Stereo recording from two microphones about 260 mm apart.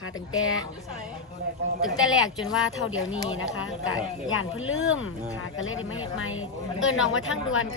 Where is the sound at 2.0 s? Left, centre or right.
Centre.